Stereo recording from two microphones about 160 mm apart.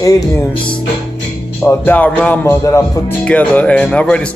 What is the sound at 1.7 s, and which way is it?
Speech, 10° left (ahead or behind).